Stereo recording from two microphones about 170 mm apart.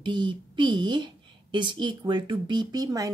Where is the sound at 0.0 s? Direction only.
30° right (ahead or behind).